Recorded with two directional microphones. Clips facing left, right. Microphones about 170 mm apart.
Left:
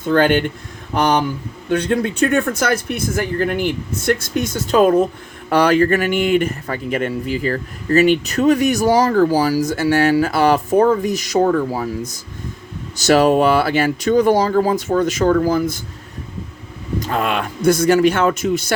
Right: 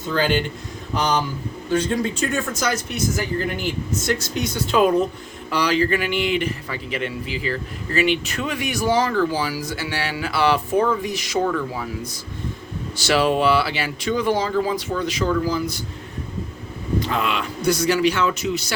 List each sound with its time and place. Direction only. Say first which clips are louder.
0.0 s speech: left 6 dB; 55° left (ahead or behind)
17.0 s speech: left 5 dB; 45° left (ahead or behind)